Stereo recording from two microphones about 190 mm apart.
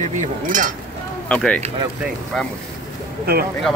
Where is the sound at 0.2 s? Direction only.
45° right (ahead or behind).